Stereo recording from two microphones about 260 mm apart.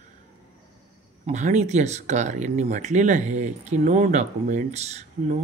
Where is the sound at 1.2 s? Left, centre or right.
Right.